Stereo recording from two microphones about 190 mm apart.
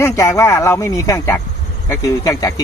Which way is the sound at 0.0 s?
15° left (ahead or behind).